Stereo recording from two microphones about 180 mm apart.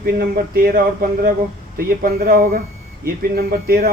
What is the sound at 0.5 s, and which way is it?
Speech, 55° right (ahead or behind).